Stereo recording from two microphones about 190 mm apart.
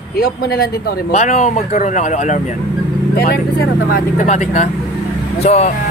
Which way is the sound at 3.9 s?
40° left (ahead or behind).